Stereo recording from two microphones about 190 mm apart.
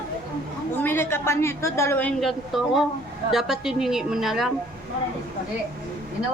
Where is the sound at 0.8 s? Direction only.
10° left (ahead or behind).